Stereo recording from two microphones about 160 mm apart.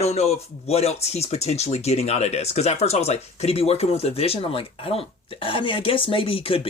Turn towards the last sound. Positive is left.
turn(degrees=35)  # may be behind; listen again after turning